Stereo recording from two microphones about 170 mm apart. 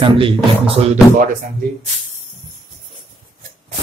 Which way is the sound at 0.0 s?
30° right (ahead or behind).